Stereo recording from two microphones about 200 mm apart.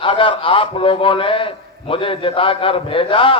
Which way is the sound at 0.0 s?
25° left (ahead or behind).